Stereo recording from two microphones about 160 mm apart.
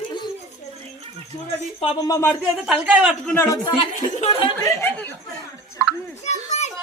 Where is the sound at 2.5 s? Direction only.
5° right (ahead or behind).